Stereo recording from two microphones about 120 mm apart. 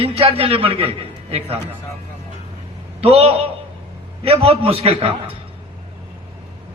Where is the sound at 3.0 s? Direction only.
55° right (ahead or behind).